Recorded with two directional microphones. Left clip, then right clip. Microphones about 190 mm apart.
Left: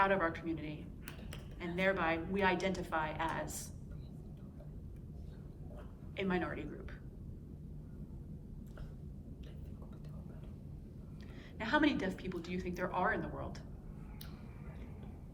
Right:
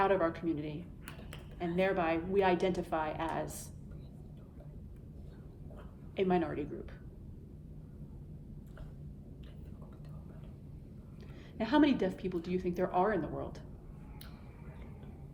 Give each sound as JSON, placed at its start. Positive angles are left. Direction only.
{"t": 0.0, "sound": "a woman's voice", "side_deg": -45}
{"t": 1.8, "sound": "a woman's voice", "side_deg": -45}
{"t": 6.1, "sound": "a woman's voice", "side_deg": -45}
{"t": 11.5, "sound": "a woman's voice", "side_deg": -45}